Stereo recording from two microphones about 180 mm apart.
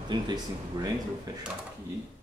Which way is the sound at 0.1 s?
25° right (ahead or behind).